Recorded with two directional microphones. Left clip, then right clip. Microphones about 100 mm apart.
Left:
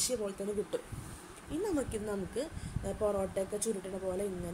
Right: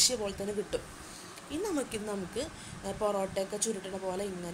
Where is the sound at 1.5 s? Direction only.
40° left (ahead or behind).